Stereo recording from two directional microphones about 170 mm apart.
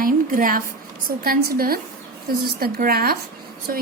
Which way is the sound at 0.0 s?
55° right (ahead or behind).